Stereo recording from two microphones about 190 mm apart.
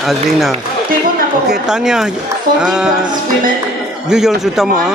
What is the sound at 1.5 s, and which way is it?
A man's voice, 5° right (ahead or behind).